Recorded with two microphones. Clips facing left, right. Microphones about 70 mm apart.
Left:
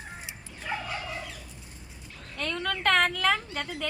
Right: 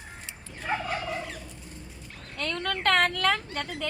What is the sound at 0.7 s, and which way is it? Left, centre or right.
Fowl, right.